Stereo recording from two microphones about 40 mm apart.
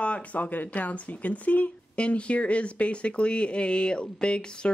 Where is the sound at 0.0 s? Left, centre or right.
Left.